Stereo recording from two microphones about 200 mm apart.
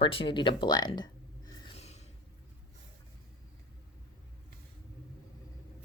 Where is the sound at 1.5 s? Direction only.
25° left (ahead or behind).